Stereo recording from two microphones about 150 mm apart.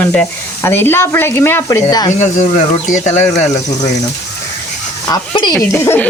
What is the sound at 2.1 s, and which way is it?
Speech, 50° left (ahead or behind).